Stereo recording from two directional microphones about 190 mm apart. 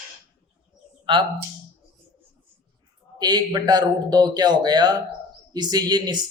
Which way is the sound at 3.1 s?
20° right (ahead or behind).